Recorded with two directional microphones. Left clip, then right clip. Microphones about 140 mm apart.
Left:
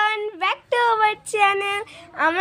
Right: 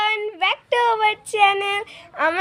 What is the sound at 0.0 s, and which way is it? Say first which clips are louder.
A woman's voice: right 1 dB; 20° right (ahead or behind).